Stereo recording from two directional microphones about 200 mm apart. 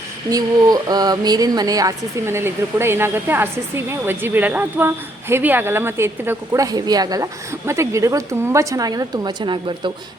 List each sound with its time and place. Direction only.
0.3 s speech: 20° right (ahead or behind)